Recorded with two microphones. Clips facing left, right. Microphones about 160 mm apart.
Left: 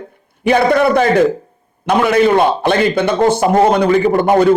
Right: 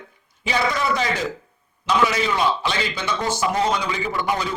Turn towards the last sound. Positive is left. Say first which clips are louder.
# left 14 dB
turn(degrees=55)  # may be behind; listen again after turning